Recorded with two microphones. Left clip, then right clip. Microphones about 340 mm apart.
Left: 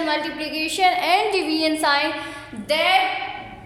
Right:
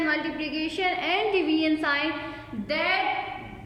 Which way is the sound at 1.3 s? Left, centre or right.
Left.